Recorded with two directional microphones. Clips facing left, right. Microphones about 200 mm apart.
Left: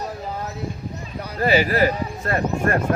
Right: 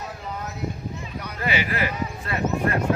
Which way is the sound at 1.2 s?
35° left (ahead or behind).